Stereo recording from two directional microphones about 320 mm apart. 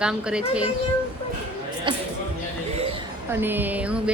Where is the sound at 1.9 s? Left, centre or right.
Centre.